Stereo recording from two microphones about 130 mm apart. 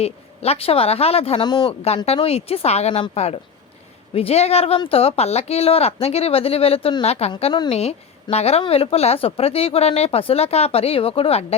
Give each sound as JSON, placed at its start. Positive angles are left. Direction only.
{"t": 0.0, "sound": "a woman's voice", "side_deg": 50}
{"t": 1.5, "sound": "speech", "side_deg": 35}
{"t": 2.2, "sound": "a woman's voice", "side_deg": 50}